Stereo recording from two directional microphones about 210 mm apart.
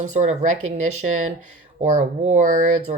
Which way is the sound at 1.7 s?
35° right (ahead or behind).